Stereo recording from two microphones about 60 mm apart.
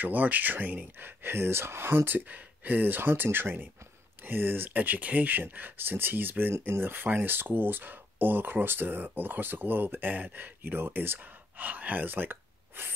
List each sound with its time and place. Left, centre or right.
0.0 s speech: right
2.1 s speech: right